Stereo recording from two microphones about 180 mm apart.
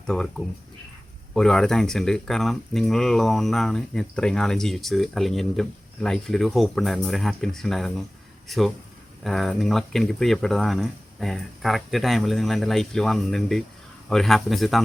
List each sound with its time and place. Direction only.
0.1 s speech: 5° left (ahead or behind)